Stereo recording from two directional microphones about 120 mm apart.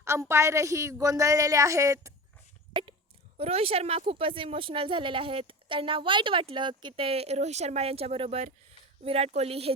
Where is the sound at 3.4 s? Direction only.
55° right (ahead or behind).